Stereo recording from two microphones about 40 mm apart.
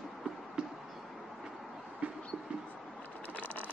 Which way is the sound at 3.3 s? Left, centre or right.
Left.